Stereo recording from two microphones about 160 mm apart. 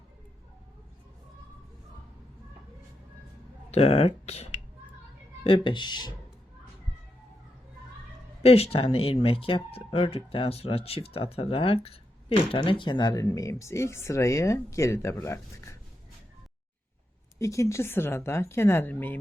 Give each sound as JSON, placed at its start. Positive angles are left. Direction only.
{"t": 3.7, "sound": "speech", "side_deg": 40}
{"t": 8.4, "sound": "speech", "side_deg": 40}
{"t": 17.3, "sound": "a woman's voice", "side_deg": 20}